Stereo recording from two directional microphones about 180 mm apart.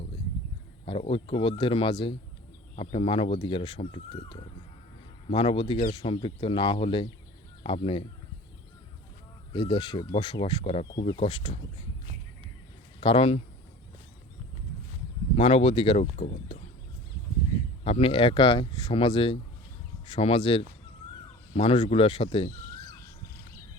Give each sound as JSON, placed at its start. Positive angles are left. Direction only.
{"t": 0.9, "sound": "speech", "side_deg": 30}
{"t": 9.5, "sound": "speech", "side_deg": 25}
{"t": 13.0, "sound": "speech", "side_deg": 30}
{"t": 15.4, "sound": "speech", "side_deg": 35}
{"t": 17.8, "sound": "speech", "side_deg": 30}